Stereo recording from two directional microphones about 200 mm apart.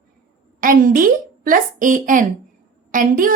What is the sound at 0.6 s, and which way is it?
A woman's voice, 45° right (ahead or behind).